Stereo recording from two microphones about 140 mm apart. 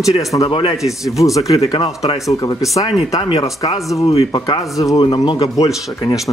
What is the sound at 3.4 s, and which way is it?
Speech, 25° left (ahead or behind).